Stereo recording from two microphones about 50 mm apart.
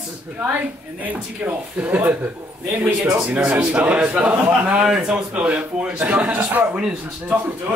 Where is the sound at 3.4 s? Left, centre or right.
Right.